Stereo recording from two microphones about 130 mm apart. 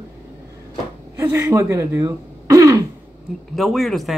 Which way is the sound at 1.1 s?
20° right (ahead or behind).